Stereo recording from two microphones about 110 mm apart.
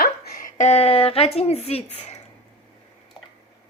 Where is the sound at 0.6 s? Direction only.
80° left.